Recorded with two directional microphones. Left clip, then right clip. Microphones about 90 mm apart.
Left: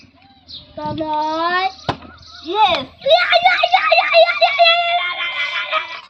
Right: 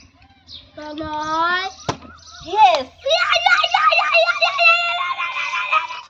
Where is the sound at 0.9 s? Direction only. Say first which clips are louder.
Left 2 dB; 25° right (ahead or behind).